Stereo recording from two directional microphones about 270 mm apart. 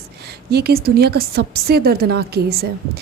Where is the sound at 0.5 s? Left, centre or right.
Right.